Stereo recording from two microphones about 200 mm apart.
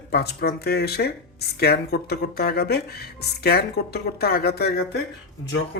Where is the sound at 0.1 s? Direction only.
55° left (ahead or behind).